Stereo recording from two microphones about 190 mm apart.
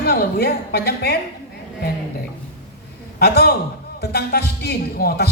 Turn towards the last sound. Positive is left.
turn(degrees=55)  # may be behind; listen again after turning